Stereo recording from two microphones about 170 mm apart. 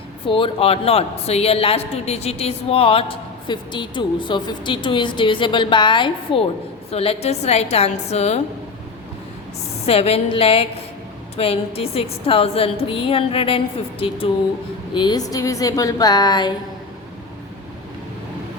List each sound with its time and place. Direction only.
0.3 s a woman's voice: 30° left (ahead or behind)
9.8 s a woman's voice: 35° left (ahead or behind)
14.9 s a woman's voice: 25° left (ahead or behind)